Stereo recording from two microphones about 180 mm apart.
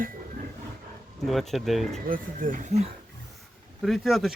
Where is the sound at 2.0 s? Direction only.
50° right (ahead or behind).